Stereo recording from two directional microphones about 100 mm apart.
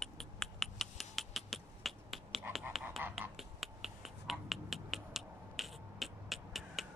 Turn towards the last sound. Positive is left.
turn(degrees=0)  # may be behind; listen again after turning